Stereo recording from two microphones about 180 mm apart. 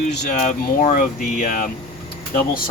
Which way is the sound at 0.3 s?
45° left (ahead or behind).